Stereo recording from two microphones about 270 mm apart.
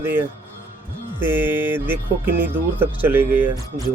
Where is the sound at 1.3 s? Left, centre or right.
Centre.